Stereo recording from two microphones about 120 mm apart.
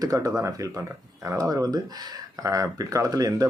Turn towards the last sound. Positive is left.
turn(degrees=-30)  # may be behind; listen again after turning